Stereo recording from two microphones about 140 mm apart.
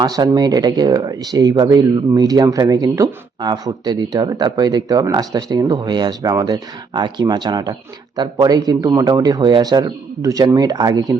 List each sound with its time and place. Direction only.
0.0 s speech: 30° right (ahead or behind)